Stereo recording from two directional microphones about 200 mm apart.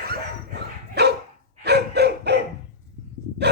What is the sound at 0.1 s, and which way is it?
Dog, 55° right (ahead or behind).